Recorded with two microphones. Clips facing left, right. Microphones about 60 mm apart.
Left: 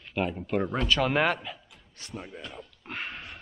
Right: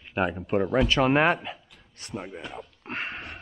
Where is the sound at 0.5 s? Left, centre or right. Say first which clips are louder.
Right 5 dB; centre.